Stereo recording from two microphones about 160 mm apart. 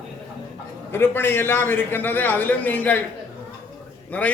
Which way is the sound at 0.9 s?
15° left (ahead or behind).